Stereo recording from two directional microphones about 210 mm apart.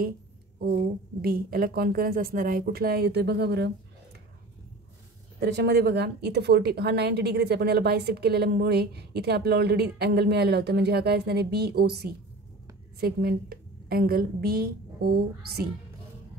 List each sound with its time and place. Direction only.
0.6 s a woman's voice: 45° right (ahead or behind)
5.4 s a woman's voice: 50° right (ahead or behind)